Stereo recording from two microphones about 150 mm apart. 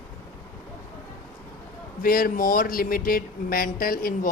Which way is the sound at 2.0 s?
70° left (ahead or behind).